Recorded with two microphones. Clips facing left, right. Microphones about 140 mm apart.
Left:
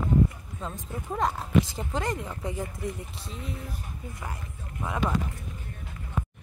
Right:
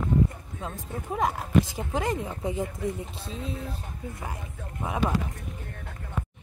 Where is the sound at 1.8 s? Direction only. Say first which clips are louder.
Right 2 dB; 15° right (ahead or behind).